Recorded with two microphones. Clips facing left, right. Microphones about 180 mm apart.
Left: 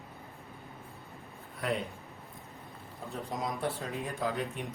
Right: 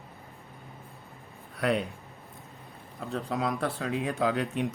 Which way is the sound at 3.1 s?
65° right (ahead or behind).